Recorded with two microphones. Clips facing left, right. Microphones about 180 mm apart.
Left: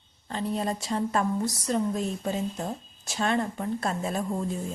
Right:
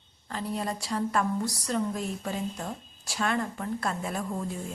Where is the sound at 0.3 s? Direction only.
25° left (ahead or behind).